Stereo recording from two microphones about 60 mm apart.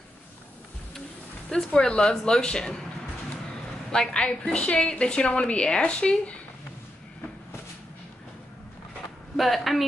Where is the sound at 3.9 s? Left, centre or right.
Centre.